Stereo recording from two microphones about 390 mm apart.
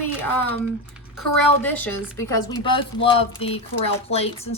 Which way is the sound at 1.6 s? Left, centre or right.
Centre.